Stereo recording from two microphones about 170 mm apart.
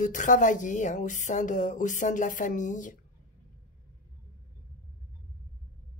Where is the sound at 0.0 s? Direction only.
50° left (ahead or behind).